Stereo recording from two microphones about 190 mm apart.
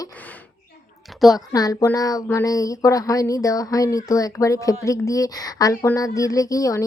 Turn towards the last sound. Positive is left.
turn(degrees=15)  # may be behind; listen again after turning